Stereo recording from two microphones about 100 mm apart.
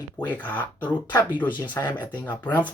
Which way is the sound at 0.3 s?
15° left (ahead or behind).